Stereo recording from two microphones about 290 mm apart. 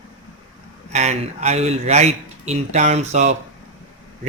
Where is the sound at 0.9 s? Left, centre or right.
Right.